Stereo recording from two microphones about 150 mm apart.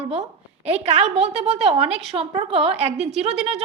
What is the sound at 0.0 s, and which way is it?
A woman's voice, 45° right (ahead or behind).